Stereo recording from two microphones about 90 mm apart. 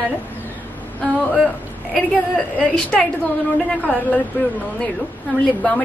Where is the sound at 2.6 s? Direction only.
15° left (ahead or behind).